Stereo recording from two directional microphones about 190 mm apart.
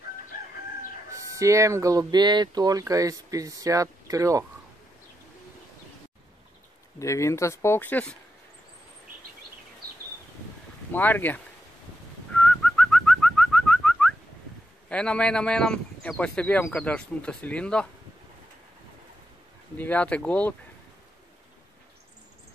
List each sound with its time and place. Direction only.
1.1 s speech: 15° right (ahead or behind)
7.0 s speech: 15° left (ahead or behind)
10.9 s speech: 10° left (ahead or behind)
12.4 s bird: 5° left (ahead or behind)
14.9 s speech: 5° left (ahead or behind)
19.8 s speech: 5° left (ahead or behind)